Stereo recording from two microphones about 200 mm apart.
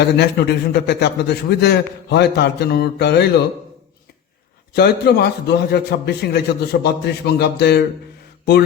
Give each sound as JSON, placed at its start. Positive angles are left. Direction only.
{"t": 0.2, "sound": "a man's voice", "side_deg": 55}
{"t": 4.7, "sound": "a man's voice", "side_deg": 55}